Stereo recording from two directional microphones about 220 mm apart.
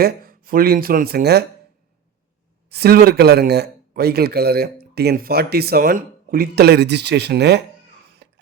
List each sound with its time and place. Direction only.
0.0 s speech: 40° right (ahead or behind)
2.6 s speech: 45° right (ahead or behind)
8.2 s a sound: 50° right (ahead or behind)